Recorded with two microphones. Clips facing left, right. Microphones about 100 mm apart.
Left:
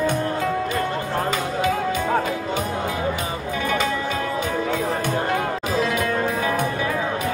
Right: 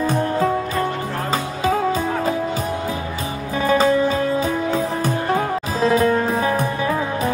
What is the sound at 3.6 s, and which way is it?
Music, 35° right (ahead or behind).